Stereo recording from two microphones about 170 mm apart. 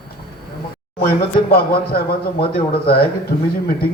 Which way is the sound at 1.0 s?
65° left (ahead or behind).